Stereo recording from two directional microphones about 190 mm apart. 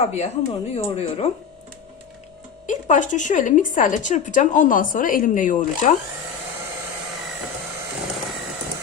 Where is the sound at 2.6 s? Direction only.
40° left (ahead or behind).